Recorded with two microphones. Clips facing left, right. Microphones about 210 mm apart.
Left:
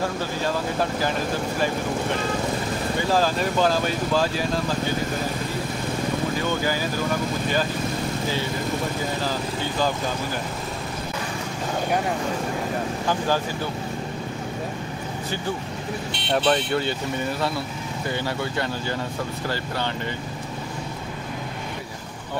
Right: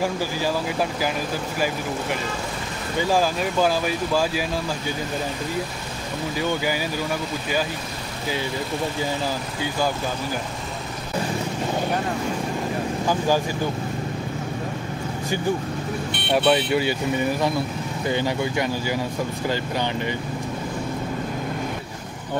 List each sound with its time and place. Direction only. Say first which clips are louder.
3.1 s speech: even; 10° right (ahead or behind)
16.3 s speech: right 2 dB; 10° right (ahead or behind)
18.0 s speech: right 4 dB; 15° right (ahead or behind)